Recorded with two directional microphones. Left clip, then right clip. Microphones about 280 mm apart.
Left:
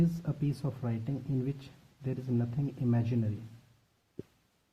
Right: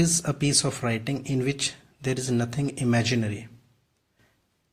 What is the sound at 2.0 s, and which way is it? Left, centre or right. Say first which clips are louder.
Speech: right 9 dB; centre.